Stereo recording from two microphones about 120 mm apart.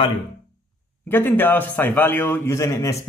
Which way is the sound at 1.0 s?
15° left (ahead or behind).